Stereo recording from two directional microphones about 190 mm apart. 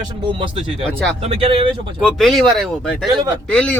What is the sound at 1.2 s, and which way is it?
Speech, 30° right (ahead or behind).